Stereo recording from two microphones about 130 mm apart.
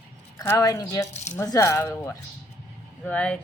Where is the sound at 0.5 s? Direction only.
25° left (ahead or behind).